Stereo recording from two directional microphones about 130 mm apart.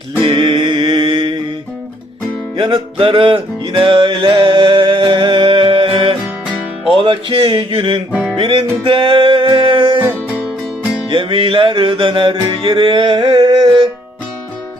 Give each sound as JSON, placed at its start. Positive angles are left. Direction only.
{"t": 0.3, "sound": "music", "side_deg": -40}
{"t": 2.6, "sound": "music", "side_deg": -40}
{"t": 6.9, "sound": "a sound", "side_deg": -40}
{"t": 8.4, "sound": "music", "side_deg": -40}
{"t": 11.1, "sound": "music", "side_deg": -40}